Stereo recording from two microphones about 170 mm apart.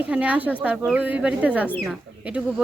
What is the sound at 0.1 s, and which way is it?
Speech, 10° right (ahead or behind).